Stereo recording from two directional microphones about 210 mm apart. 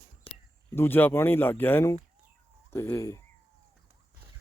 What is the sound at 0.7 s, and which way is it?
Speech, 10° left (ahead or behind).